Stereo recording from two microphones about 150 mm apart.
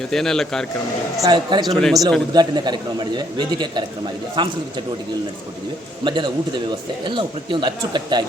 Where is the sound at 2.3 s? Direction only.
30° right (ahead or behind).